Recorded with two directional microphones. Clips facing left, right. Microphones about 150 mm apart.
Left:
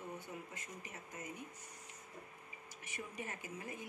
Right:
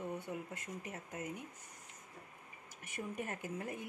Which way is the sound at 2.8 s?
55° right (ahead or behind).